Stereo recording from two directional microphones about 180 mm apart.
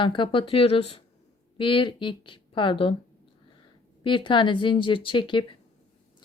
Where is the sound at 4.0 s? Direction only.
30° left (ahead or behind).